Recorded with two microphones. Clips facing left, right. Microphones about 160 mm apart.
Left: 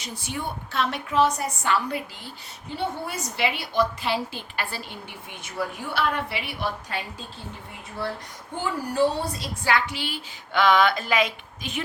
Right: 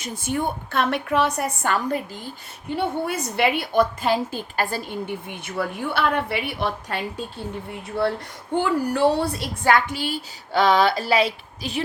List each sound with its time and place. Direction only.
0.0 s a woman's voice: 50° right (ahead or behind)
8.0 s a woman's voice: 70° right (ahead or behind); by 11.8 s 35° right (ahead or behind)